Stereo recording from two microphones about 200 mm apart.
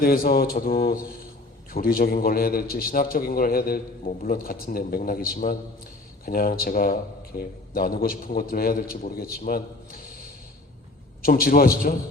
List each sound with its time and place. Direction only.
0.0 s a man's voice: 45° left (ahead or behind)